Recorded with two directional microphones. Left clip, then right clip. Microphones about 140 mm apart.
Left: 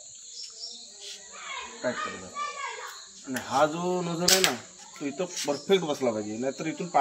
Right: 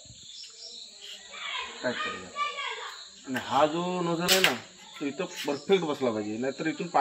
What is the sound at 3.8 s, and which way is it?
Speech, 15° left (ahead or behind).